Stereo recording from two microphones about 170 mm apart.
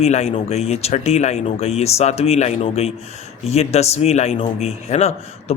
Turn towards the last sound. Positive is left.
turn(degrees=40)  # may be behind; listen again after turning